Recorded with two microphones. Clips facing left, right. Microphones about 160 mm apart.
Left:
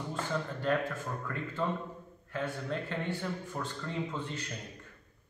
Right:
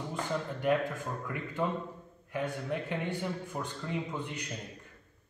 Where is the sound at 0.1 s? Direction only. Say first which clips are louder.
Even; 15° right (ahead or behind).